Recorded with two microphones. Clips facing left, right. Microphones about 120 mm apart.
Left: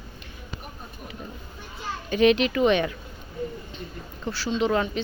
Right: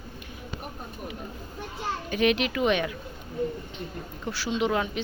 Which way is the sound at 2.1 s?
5° right (ahead or behind).